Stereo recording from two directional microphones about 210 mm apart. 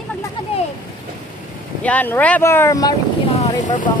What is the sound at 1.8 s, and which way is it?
Speech, 5° left (ahead or behind).